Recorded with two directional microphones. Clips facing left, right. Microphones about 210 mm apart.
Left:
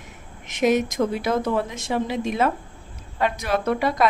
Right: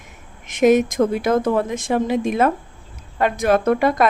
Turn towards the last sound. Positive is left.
turn(degrees=-50)  # may be behind; listen again after turning